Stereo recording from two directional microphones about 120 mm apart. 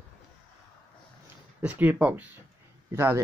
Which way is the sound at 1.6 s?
10° right (ahead or behind).